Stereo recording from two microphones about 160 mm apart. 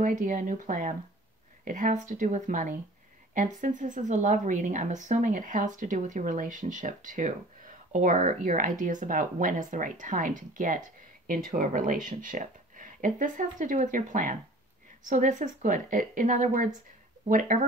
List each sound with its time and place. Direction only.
0.0 s a woman's voice: 55° right (ahead or behind)